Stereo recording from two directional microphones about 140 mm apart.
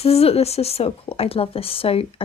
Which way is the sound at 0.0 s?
45° left (ahead or behind).